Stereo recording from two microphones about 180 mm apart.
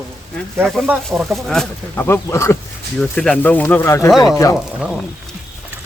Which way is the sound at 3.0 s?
5° left (ahead or behind).